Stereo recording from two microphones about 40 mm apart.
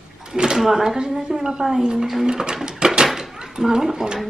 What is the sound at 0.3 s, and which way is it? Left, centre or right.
Drawer open or close, centre.